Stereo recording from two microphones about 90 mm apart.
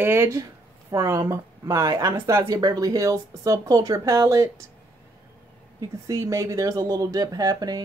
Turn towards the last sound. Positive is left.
turn(degrees=-45)  # may be behind; listen again after turning